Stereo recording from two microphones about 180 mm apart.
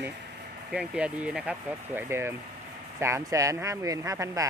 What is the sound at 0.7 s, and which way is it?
Speech, 5° right (ahead or behind).